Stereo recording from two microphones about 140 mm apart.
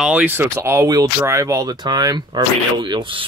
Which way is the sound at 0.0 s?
10° right (ahead or behind).